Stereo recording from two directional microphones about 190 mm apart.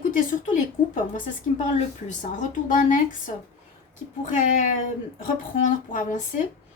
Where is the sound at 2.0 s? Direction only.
40° left (ahead or behind).